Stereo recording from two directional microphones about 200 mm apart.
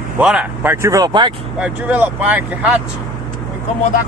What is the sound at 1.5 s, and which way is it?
Speech, 5° right (ahead or behind).